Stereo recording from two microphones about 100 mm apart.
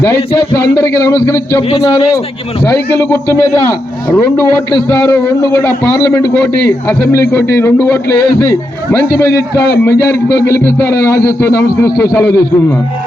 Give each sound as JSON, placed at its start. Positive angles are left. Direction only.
{"t": 0.0, "sound": "a man's voice", "side_deg": 30}
{"t": 2.6, "sound": "a man's voice", "side_deg": 25}
{"t": 4.9, "sound": "a man's voice", "side_deg": 25}
{"t": 6.8, "sound": "a man's voice", "side_deg": 25}